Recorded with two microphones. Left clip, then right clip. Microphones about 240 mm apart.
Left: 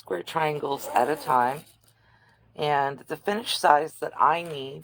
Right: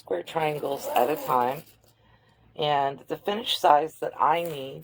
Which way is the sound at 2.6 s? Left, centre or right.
Left.